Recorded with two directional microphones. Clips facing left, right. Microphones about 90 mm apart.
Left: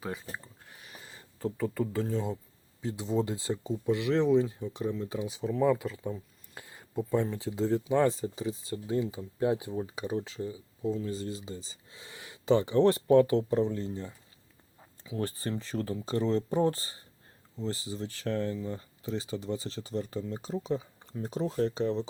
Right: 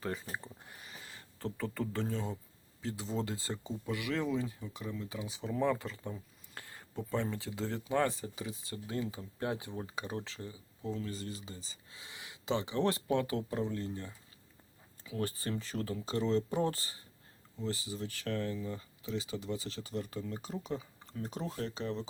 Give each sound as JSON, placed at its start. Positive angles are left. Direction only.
{"t": 0.0, "sound": "speech", "side_deg": 0}
{"t": 0.7, "sound": "a sound", "side_deg": 0}
{"t": 1.4, "sound": "speech", "side_deg": 5}
{"t": 3.2, "sound": "speech", "side_deg": 20}
{"t": 5.4, "sound": "speech", "side_deg": 5}
{"t": 15.2, "sound": "speech", "side_deg": 35}